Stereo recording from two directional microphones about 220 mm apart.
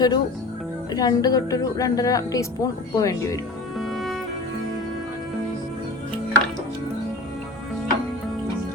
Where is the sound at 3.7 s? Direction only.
Centre (ahead or behind).